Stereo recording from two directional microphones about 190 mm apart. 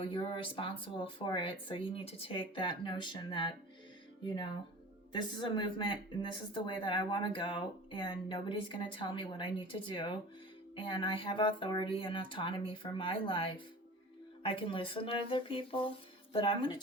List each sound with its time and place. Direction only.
0.0 s speech: 25° left (ahead or behind)